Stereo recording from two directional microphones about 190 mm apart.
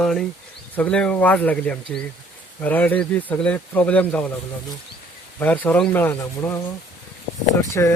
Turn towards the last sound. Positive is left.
turn(degrees=15)  # may be behind; listen again after turning